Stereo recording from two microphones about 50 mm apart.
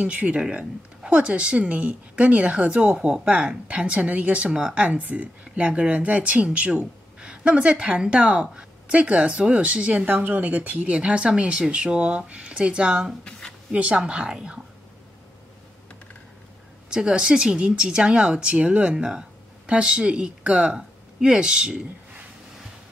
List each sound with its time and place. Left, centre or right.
0.0 s speech: right
10.0 s speech: right; by 14.6 s centre
16.9 s speech: centre